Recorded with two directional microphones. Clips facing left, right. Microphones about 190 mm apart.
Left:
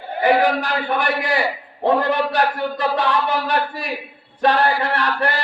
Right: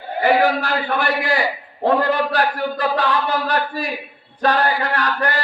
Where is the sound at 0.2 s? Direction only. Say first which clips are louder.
Even; 20° left (ahead or behind).